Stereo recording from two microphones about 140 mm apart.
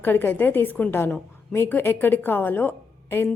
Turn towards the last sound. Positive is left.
turn(degrees=15)  # may be behind; listen again after turning